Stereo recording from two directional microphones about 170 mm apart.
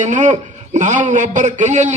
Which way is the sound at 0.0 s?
45° right (ahead or behind).